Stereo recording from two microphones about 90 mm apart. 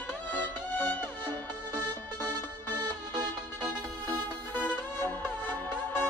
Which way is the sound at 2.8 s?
45° right (ahead or behind).